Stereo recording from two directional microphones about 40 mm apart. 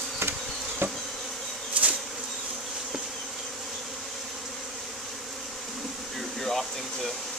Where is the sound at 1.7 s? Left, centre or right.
Right.